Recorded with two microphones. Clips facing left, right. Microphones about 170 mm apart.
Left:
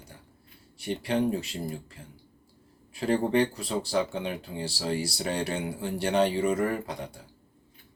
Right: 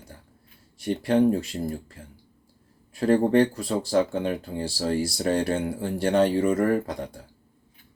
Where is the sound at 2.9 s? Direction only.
45° right (ahead or behind).